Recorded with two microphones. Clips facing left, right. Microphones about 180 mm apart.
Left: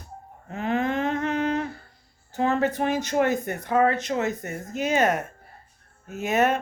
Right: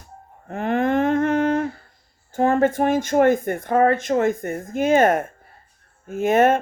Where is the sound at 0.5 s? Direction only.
55° right (ahead or behind).